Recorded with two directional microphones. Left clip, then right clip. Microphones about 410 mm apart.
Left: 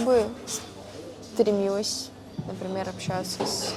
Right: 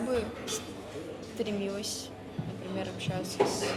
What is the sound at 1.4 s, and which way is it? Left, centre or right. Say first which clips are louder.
Speech: left 11 dB; left.